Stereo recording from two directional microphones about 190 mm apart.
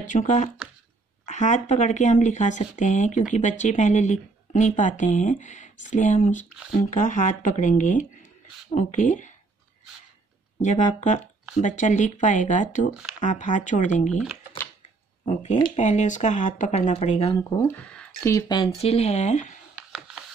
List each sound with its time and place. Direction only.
0.0 s speech: 40° left (ahead or behind)
10.6 s speech: 40° left (ahead or behind)
14.0 s speech: centre (ahead or behind)
15.2 s speech: 40° left (ahead or behind)
17.4 s speech: 15° left (ahead or behind)
18.3 s speech: 25° left (ahead or behind)